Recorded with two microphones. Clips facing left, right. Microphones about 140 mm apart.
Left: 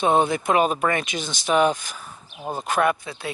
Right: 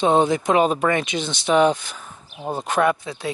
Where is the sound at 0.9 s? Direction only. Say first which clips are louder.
Right 3 dB; 20° right (ahead or behind).